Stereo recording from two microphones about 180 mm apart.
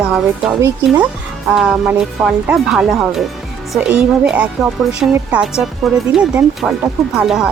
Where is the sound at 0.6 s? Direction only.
15° right (ahead or behind).